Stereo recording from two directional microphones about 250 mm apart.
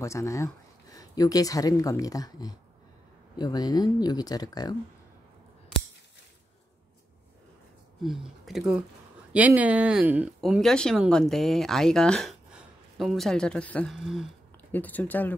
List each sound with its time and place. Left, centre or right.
0.0 s speech: centre
8.0 s speech: centre